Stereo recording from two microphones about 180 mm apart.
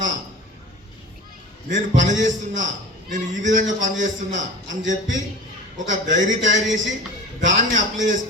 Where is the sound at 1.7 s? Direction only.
45° right (ahead or behind).